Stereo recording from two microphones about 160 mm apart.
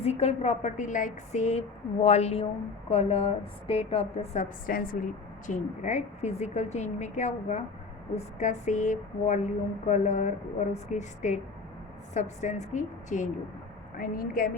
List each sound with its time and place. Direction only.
0.0 s a woman's voice: 40° left (ahead or behind); by 5.0 s 60° left (ahead or behind)
5.5 s speech: 50° left (ahead or behind)
14.0 s a woman's voice: 65° left (ahead or behind)